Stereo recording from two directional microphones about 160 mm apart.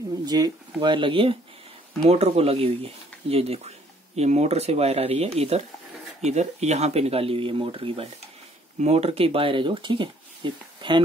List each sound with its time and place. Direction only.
0.2 s speech: 25° right (ahead or behind)